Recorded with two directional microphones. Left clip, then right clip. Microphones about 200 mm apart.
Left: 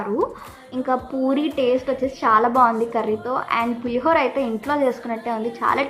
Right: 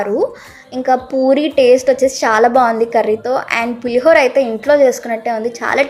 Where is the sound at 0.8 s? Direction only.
20° right (ahead or behind).